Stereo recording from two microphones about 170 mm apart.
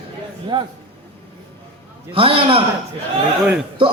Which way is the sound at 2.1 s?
35° right (ahead or behind).